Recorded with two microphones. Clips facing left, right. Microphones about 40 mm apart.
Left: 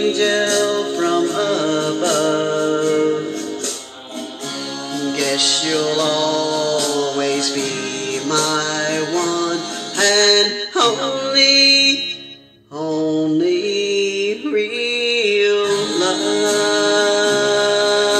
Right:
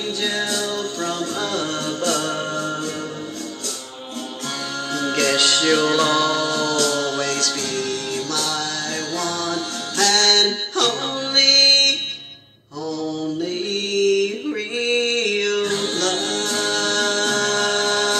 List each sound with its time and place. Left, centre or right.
0.0 s music: left
0.7 s music: left
2.2 s music: centre
2.8 s music: left
5.1 s music: centre
6.5 s a capella: centre
6.8 s music: centre
7.2 s music: left
8.3 s music: left
12.9 s mantra: left
14.1 s music: left
16.4 s a capella: left